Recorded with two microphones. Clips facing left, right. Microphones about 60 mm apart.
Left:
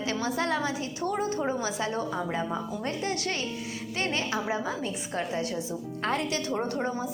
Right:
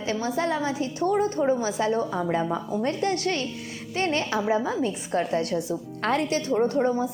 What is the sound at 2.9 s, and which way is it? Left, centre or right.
A woman's voice, right.